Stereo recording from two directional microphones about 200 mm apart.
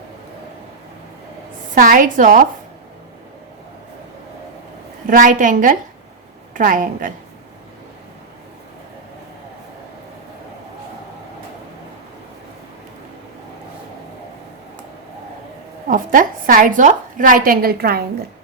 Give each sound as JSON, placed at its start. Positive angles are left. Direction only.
{"t": 1.7, "sound": "a woman's voice", "side_deg": -45}
{"t": 5.0, "sound": "a woman's voice", "side_deg": -40}
{"t": 15.9, "sound": "a woman's voice", "side_deg": -45}